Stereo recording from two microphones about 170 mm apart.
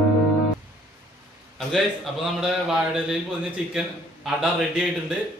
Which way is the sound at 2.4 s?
5° right (ahead or behind).